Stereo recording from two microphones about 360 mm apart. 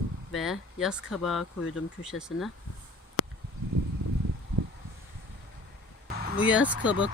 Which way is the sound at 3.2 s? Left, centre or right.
Left.